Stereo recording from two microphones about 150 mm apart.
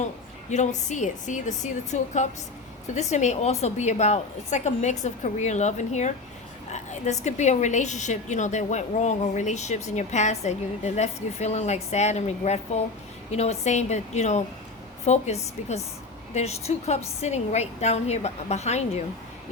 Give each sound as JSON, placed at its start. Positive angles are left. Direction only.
{"t": 0.5, "sound": "a woman's voice", "side_deg": 50}